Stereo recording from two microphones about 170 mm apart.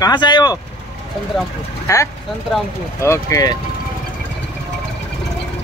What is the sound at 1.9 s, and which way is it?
Speech, 15° left (ahead or behind).